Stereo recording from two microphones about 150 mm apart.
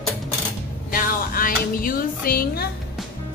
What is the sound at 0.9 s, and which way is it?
Speech, 70° left (ahead or behind).